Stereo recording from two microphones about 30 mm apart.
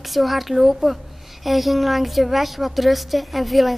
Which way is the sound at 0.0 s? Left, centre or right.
Centre.